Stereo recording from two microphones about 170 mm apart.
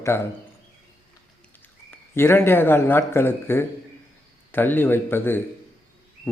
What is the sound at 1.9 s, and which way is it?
Speech, 15° left (ahead or behind).